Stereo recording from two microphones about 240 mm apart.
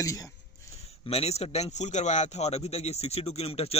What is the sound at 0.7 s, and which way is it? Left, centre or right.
A man's voice, left.